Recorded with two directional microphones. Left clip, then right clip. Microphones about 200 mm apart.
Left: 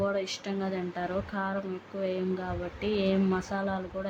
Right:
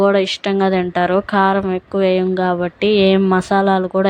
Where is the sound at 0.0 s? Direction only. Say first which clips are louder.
Right 16 dB; 45° right (ahead or behind).